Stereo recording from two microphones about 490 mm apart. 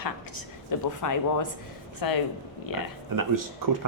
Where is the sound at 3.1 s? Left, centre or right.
Right.